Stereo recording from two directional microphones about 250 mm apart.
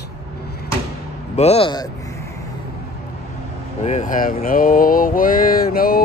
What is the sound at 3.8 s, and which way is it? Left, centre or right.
Speech, left.